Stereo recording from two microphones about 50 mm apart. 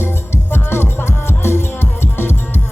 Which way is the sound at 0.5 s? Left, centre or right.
Left.